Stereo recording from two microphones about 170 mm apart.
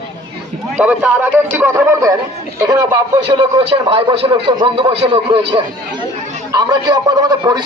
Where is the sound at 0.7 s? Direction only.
10° right (ahead or behind).